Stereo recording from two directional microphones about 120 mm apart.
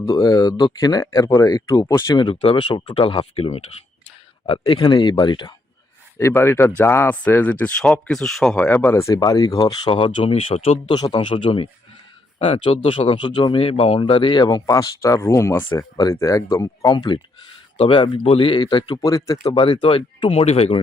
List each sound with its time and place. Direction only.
0.1 s speech: 30° left (ahead or behind)
2.3 s speech: 55° left (ahead or behind)
4.7 s speech: 45° left (ahead or behind)
6.1 s speech: 20° left (ahead or behind); by 10.9 s 55° left (ahead or behind)
10.9 s speech: 35° left (ahead or behind); by 12.7 s 50° left (ahead or behind)
13.1 s speech: 40° left (ahead or behind)
16.9 s speech: 40° left (ahead or behind)
20.4 s speech: 65° left (ahead or behind)